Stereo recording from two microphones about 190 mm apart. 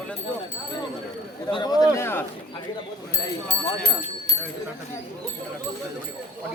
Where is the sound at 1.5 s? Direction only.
20° left (ahead or behind).